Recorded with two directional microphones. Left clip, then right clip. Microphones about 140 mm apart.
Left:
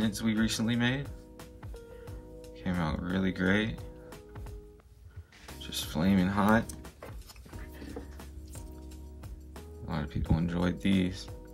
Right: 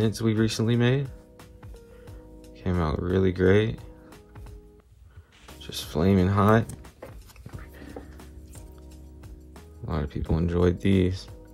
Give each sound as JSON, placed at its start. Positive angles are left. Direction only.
{"t": 0.0, "sound": "speech", "side_deg": -45}
{"t": 2.5, "sound": "speech", "side_deg": -45}
{"t": 5.6, "sound": "speech", "side_deg": -45}
{"t": 9.8, "sound": "speech", "side_deg": -50}